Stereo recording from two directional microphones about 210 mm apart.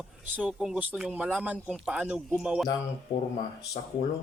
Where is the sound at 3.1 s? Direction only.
20° left (ahead or behind).